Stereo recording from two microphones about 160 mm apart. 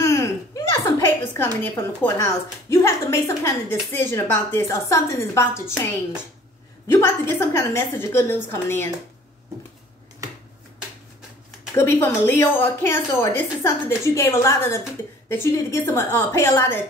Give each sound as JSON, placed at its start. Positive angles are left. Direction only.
{"t": 0.0, "sound": "a sound", "side_deg": 20}
{"t": 2.0, "sound": "a woman's voice", "side_deg": 20}
{"t": 11.7, "sound": "a woman's voice", "side_deg": 15}